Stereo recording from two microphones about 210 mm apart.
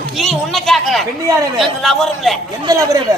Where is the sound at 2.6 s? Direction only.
15° right (ahead or behind).